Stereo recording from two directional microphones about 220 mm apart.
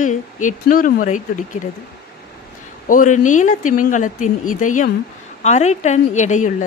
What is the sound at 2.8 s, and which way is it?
A woman's voice, 35° left (ahead or behind).